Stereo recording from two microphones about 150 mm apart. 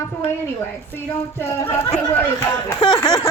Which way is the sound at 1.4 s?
15° left (ahead or behind).